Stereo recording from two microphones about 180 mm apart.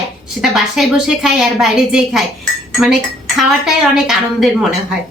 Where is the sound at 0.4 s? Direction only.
Centre (ahead or behind).